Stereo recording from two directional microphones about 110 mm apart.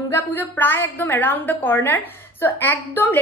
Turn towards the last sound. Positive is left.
turn(degrees=20)  # may be behind; listen again after turning